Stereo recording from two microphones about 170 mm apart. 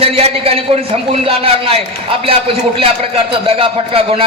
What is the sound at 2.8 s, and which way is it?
A man's voice, 35° right (ahead or behind).